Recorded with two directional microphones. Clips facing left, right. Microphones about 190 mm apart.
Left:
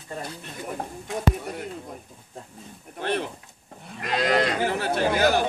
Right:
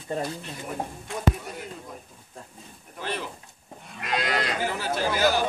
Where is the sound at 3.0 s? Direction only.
60° left (ahead or behind).